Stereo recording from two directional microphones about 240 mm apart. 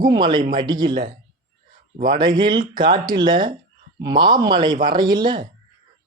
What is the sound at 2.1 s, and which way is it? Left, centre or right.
Speech, centre.